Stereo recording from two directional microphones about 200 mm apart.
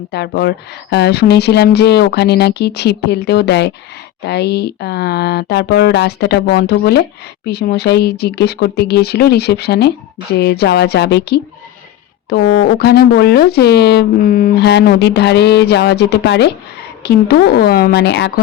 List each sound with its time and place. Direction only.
0.1 s a woman's voice: 55° left (ahead or behind)